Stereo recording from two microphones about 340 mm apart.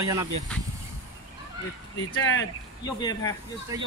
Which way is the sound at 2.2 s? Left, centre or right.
Left.